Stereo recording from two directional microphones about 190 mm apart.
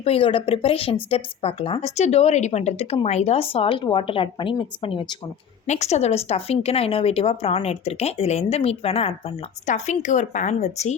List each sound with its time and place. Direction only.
0.0 s speech: 30° left (ahead or behind)
5.6 s speech: 35° left (ahead or behind)